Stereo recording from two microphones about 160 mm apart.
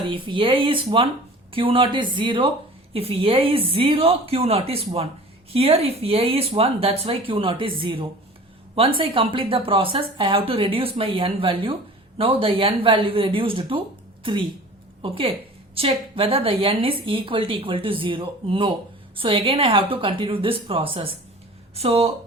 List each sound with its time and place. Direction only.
0.1 s a woman's voice: 30° right (ahead or behind)
15.0 s a woman's voice: 35° right (ahead or behind)